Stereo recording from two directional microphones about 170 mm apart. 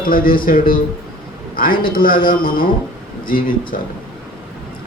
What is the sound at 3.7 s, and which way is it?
Speech, 55° left (ahead or behind).